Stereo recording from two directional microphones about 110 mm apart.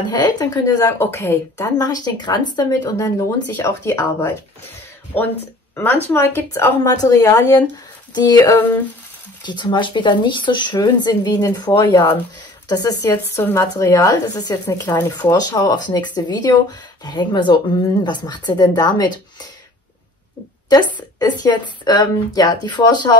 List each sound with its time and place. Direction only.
0.1 s a woman's voice: 35° left (ahead or behind)
0.9 s speech: 20° left (ahead or behind)
1.8 s a woman's voice: 35° left (ahead or behind)
6.8 s a woman's voice: 35° left (ahead or behind)
8.4 s speech: 20° left (ahead or behind)
9.5 s a woman's voice: 45° left (ahead or behind)
20.7 s a woman's voice: 40° left (ahead or behind)